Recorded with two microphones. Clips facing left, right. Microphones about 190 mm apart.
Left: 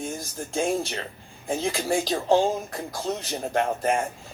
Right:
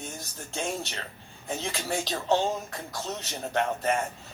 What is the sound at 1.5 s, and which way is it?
Speech, 45° left (ahead or behind).